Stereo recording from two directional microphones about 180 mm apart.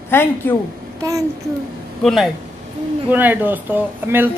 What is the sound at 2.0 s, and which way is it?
Speech, centre (ahead or behind).